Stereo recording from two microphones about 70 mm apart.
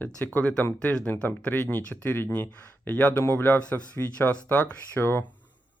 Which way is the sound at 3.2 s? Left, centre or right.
Left.